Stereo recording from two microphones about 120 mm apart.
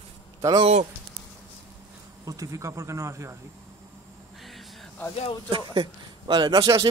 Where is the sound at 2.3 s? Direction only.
25° right (ahead or behind).